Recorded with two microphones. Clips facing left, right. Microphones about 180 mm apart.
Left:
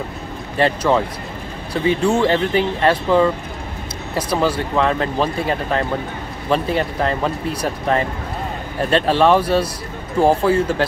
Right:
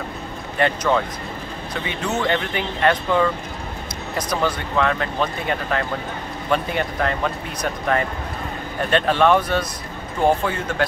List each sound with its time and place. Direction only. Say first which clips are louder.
0.6 s speech: left 3 dB; 30° left (ahead or behind)
4.3 s speech: left 5 dB; 30° left (ahead or behind)